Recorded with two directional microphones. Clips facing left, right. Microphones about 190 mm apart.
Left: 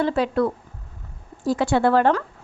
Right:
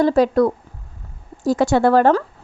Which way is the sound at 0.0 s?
40° right (ahead or behind).